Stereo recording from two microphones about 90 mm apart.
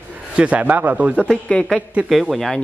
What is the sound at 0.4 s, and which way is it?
Speech, 15° right (ahead or behind).